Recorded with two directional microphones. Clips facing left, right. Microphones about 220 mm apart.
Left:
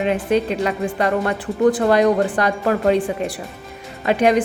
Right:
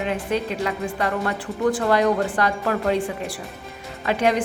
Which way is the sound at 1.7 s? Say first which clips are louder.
Left 4 dB; 20° left (ahead or behind).